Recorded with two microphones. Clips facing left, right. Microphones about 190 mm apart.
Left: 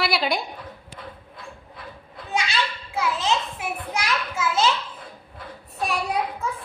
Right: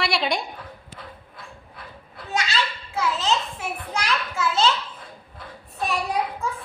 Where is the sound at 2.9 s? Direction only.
10° left (ahead or behind).